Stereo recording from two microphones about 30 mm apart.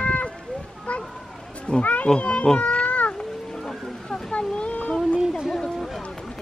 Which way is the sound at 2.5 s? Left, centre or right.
Left.